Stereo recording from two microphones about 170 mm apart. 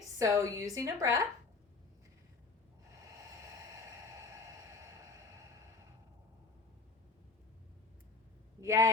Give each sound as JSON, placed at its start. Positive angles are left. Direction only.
{"t": 0.2, "sound": "a woman's voice", "side_deg": -20}
{"t": 3.2, "sound": "a sound", "side_deg": -20}
{"t": 8.6, "sound": "speech", "side_deg": -20}